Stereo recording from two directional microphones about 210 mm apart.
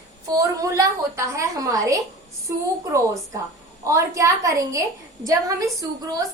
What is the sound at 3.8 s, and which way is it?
A woman's voice, 15° right (ahead or behind).